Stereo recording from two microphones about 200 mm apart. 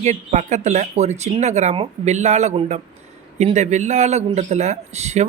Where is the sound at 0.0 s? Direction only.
35° right (ahead or behind).